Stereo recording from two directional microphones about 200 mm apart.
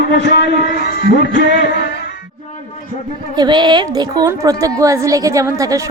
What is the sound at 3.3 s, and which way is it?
A woman's voice, 20° right (ahead or behind).